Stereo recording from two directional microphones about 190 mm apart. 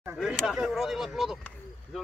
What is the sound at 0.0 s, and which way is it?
Speech, 5° right (ahead or behind).